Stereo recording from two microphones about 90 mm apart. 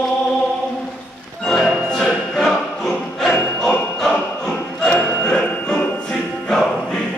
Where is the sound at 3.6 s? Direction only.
10° left (ahead or behind).